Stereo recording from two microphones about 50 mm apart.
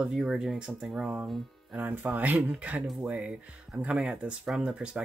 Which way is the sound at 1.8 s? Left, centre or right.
Right.